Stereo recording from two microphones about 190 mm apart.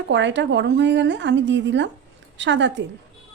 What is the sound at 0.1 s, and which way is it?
Speech, 70° right (ahead or behind).